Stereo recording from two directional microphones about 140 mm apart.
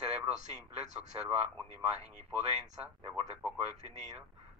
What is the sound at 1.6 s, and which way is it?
Speech, 50° right (ahead or behind).